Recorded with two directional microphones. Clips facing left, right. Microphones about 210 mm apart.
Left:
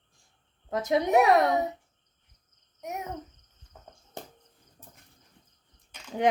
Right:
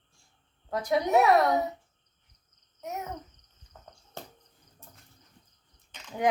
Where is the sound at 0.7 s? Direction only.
20° left (ahead or behind).